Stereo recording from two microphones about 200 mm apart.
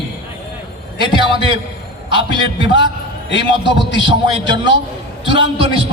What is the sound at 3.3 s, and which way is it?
Speech, 65° left (ahead or behind).